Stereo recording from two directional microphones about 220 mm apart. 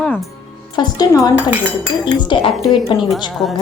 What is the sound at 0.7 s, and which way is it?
A woman's voice, 20° left (ahead or behind).